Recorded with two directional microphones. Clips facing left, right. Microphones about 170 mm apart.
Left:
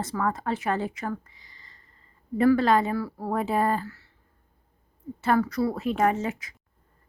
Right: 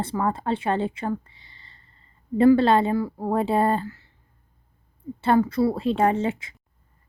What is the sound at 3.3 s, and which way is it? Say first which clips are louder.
Speech: right 3 dB; 30° right (ahead or behind).